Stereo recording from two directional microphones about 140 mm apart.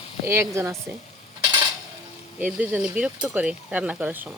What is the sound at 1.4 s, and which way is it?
Cutlery, 25° right (ahead or behind).